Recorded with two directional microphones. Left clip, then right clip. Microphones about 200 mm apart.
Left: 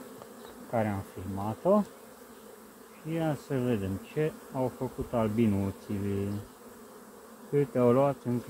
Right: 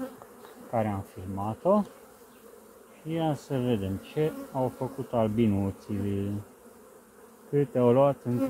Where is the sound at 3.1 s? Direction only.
30° right (ahead or behind).